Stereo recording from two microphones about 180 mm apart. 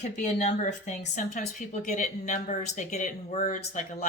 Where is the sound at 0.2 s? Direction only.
40° left (ahead or behind).